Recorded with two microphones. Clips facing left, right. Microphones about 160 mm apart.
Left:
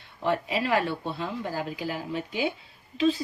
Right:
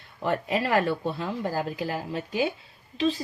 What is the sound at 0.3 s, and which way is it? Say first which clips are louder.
Speech: even; 45° right (ahead or behind).